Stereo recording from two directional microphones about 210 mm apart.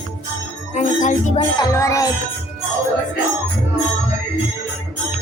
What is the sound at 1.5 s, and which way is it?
Music, 15° left (ahead or behind).